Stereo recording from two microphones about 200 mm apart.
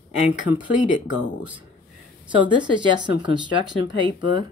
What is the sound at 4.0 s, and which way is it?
Speech, 25° right (ahead or behind).